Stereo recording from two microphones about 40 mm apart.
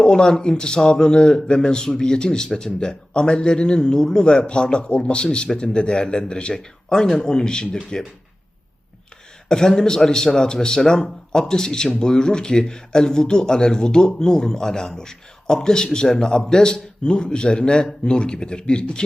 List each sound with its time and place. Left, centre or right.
0.0 s a man's voice: centre
9.5 s a man's voice: centre